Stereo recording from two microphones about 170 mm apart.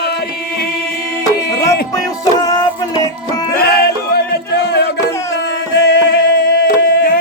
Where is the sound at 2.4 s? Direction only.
20° left (ahead or behind).